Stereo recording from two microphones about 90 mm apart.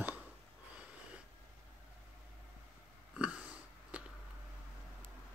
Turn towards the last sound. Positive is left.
turn(degrees=-15)  # may be behind; listen again after turning